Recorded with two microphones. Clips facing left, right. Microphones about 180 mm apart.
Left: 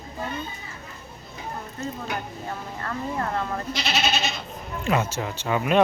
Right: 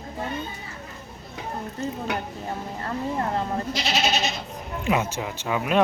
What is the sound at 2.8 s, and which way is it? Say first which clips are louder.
Speech: right 1 dB; 25° right (ahead or behind).